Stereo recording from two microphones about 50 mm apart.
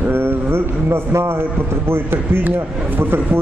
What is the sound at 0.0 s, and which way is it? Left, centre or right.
A man's voice, right.